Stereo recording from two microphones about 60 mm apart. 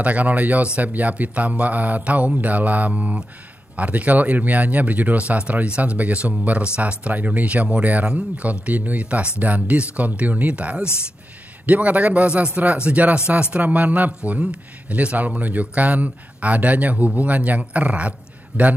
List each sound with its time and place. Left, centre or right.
0.0 s speech: right